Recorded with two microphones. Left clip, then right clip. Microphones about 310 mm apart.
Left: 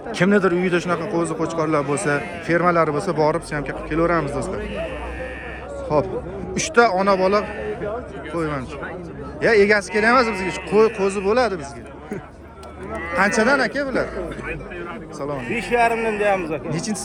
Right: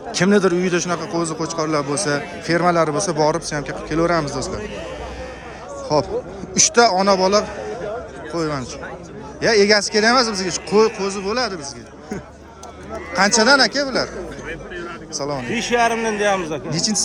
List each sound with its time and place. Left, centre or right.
0.1 s a man's voice: centre
5.9 s a man's voice: centre
13.1 s a man's voice: centre
15.7 s a man's voice: right
16.7 s a man's voice: centre